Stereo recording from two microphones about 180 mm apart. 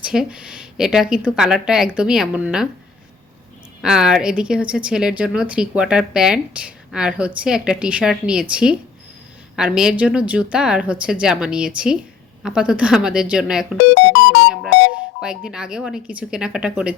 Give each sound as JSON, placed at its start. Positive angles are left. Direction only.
{"t": 0.0, "sound": "speech", "side_deg": -5}
{"t": 3.8, "sound": "speech", "side_deg": -5}
{"t": 13.8, "sound": "speech", "side_deg": 70}
{"t": 15.2, "sound": "speech", "side_deg": -5}